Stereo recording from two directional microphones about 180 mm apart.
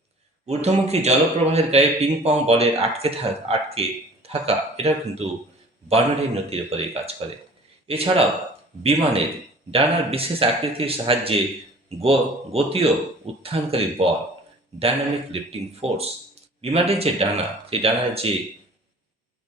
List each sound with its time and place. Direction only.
0.4 s speech: 35° right (ahead or behind)